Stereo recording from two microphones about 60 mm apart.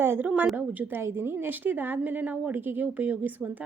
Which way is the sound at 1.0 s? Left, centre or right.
Right.